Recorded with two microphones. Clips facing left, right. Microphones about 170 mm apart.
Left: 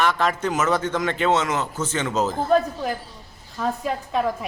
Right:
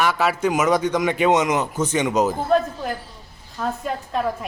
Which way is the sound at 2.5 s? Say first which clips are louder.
Even; centre (ahead or behind).